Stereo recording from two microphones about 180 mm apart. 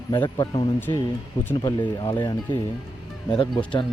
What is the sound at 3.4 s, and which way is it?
Speech, 25° left (ahead or behind).